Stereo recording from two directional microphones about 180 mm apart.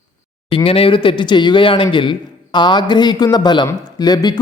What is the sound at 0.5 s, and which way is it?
Speech, 30° left (ahead or behind).